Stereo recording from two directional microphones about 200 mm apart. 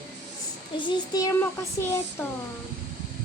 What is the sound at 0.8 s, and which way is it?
Speech, 25° left (ahead or behind).